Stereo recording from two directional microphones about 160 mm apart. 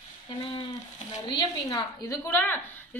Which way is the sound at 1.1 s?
25° left (ahead or behind).